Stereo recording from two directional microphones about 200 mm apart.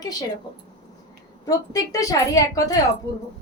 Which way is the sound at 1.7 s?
15° left (ahead or behind).